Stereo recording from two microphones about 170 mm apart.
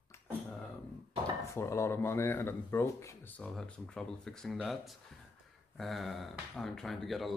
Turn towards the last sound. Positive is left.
turn(degrees=0)  # may be behind; listen again after turning